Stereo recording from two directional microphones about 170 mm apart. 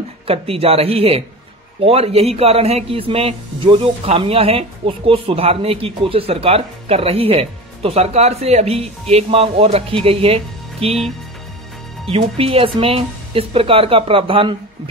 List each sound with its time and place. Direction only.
0.3 s speech: 35° right (ahead or behind)
12.1 s speech: 35° right (ahead or behind)